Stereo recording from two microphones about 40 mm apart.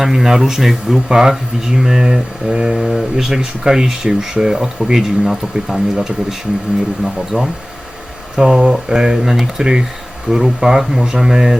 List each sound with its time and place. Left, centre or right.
0.0 s speech: centre
1.0 s speech: centre